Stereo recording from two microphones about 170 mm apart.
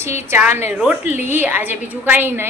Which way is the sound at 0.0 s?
15° right (ahead or behind).